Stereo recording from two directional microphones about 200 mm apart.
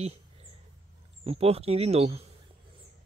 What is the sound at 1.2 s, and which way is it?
Speech, 30° right (ahead or behind).